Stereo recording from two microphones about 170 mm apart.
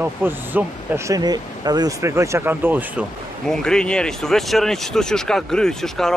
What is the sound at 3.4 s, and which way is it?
Speech, 5° left (ahead or behind).